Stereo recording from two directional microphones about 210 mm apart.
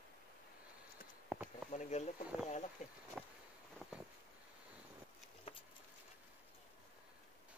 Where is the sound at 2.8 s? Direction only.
35° left (ahead or behind).